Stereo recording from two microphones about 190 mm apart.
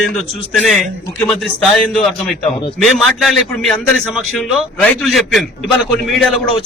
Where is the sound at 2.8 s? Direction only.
Centre (ahead or behind).